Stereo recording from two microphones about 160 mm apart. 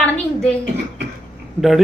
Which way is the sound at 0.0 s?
5° left (ahead or behind).